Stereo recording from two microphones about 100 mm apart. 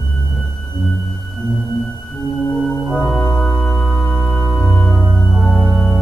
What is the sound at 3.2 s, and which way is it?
Music, 15° left (ahead or behind).